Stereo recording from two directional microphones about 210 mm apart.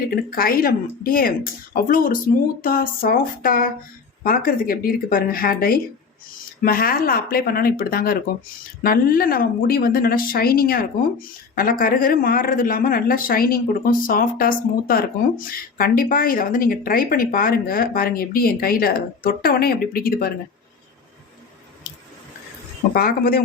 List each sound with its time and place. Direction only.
0.1 s speech: 45° left (ahead or behind)
23.0 s speech: 45° left (ahead or behind)